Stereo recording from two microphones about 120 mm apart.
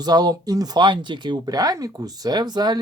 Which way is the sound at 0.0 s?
35° right (ahead or behind).